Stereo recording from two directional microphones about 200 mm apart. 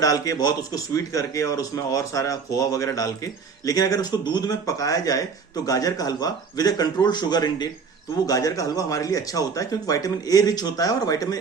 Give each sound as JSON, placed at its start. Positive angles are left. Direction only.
{"t": 0.0, "sound": "a man's voice", "side_deg": 15}